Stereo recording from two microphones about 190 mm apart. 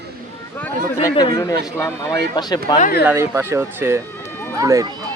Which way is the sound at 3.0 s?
10° right (ahead or behind).